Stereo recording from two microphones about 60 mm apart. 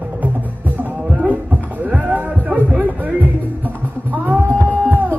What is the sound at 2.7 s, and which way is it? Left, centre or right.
Music, right.